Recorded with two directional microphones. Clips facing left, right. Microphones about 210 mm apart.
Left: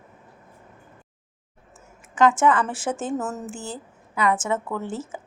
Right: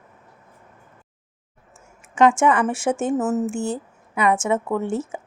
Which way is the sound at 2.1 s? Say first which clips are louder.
Right 2 dB; 25° right (ahead or behind).